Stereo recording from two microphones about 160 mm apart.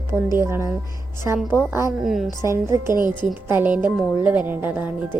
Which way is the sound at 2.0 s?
Centre (ahead or behind).